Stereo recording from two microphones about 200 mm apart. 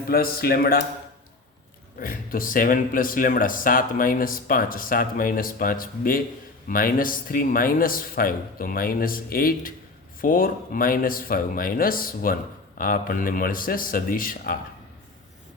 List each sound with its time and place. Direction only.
0.1 s speech: 45° left (ahead or behind)
2.0 s speech: 45° left (ahead or behind)